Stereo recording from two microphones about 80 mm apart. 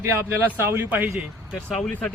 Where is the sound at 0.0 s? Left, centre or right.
Right.